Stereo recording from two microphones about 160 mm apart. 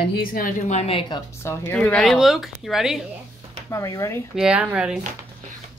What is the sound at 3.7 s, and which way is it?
Speech, 20° left (ahead or behind).